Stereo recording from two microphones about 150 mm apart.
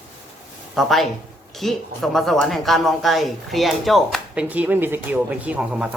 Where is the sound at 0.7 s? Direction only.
Centre (ahead or behind).